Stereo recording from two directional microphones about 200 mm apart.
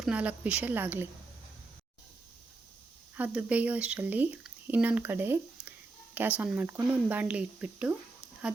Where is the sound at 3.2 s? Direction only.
5° right (ahead or behind).